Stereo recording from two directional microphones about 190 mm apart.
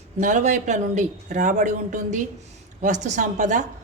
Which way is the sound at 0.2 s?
40° right (ahead or behind).